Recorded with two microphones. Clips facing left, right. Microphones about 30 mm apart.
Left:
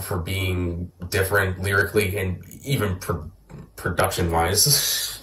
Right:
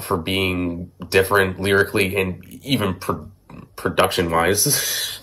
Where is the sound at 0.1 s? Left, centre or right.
Right.